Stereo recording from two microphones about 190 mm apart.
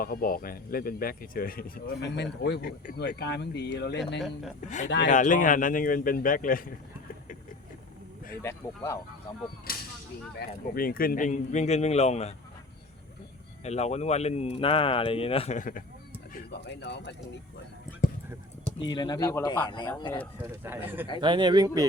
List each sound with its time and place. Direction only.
0.0 s speech: 50° left (ahead or behind)
4.6 s speech: 40° left (ahead or behind)
8.4 s speech: 10° left (ahead or behind)
9.7 s speech: 50° left (ahead or behind); by 12.3 s 35° left (ahead or behind)
13.7 s speech: 35° left (ahead or behind)
16.3 s speech: 60° left (ahead or behind)
18.8 s speech: 20° left (ahead or behind)
20.4 s speech: 10° right (ahead or behind)
21.2 s speech: 25° right (ahead or behind)